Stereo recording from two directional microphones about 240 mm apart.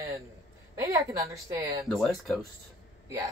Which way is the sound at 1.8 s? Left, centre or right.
Centre.